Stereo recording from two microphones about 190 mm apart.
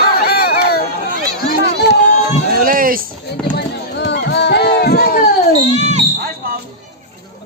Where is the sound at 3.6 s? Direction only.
65° left (ahead or behind).